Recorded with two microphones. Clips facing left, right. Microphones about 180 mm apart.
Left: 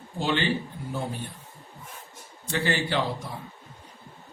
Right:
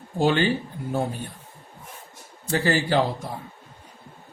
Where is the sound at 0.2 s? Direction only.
45° right (ahead or behind).